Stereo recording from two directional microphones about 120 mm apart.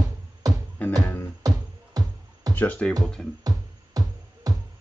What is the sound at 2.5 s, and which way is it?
Speech, 15° left (ahead or behind).